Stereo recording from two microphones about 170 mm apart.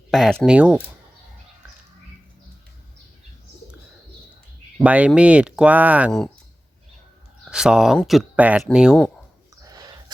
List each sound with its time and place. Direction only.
0.1 s speech: centre (ahead or behind)
4.8 s speech: 5° right (ahead or behind)
6.1 s speech: 5° left (ahead or behind)
7.4 s speech: 5° right (ahead or behind)
9.6 s a sound: 25° right (ahead or behind)